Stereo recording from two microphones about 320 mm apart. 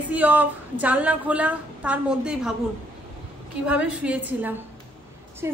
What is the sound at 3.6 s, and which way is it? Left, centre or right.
Speech, centre.